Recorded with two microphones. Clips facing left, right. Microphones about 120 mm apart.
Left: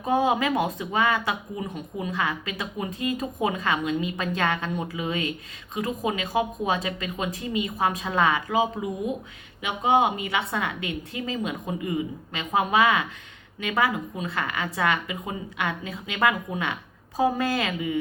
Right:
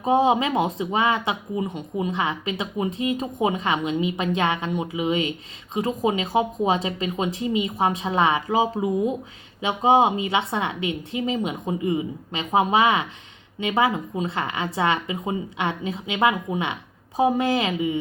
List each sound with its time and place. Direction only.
0.0 s speech: 25° right (ahead or behind)